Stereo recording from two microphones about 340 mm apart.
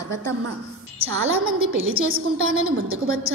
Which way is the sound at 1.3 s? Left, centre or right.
Right.